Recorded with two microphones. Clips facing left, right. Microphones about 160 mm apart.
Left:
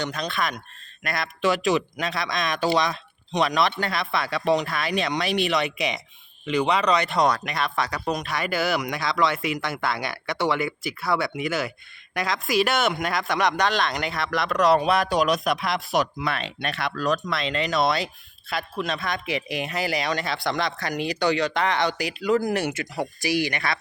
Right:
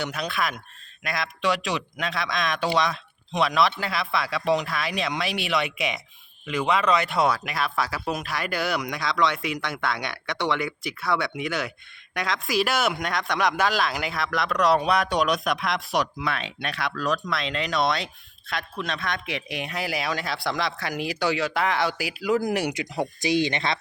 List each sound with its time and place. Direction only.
0.0 s speech: 10° right (ahead or behind)
22.4 s speech: 15° right (ahead or behind)